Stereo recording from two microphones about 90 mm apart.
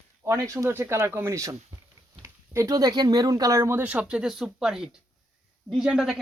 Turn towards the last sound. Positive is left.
turn(degrees=-5)  # may be behind; listen again after turning